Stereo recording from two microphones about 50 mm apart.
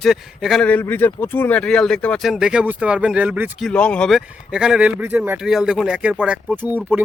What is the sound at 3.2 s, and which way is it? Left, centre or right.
Speech, right.